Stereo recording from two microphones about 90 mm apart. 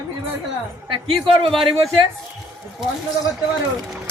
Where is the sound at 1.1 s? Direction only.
75° right (ahead or behind).